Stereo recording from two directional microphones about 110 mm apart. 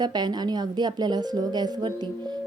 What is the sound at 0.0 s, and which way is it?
A woman's voice, 40° right (ahead or behind).